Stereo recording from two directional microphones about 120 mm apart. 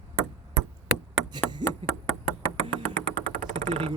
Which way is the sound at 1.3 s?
40° right (ahead or behind).